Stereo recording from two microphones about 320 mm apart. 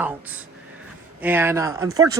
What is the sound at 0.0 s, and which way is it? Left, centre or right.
Speech, centre.